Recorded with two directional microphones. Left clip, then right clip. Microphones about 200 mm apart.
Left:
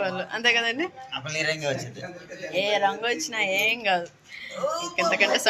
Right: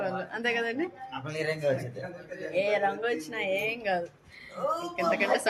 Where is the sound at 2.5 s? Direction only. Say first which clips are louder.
Left 3 dB; 5° left (ahead or behind).